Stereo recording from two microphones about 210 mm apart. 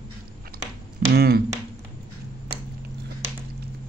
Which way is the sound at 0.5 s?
45° right (ahead or behind).